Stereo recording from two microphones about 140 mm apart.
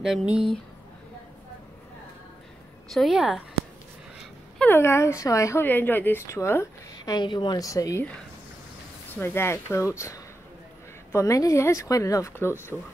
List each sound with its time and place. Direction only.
0.0 s a woman's voice: 5° right (ahead or behind)
2.9 s a woman's voice: centre (ahead or behind)
4.6 s speech: 15° left (ahead or behind)
7.2 s speech: 35° left (ahead or behind)
9.1 s speech: 15° left (ahead or behind)